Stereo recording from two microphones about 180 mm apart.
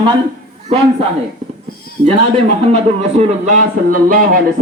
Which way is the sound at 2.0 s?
35° right (ahead or behind).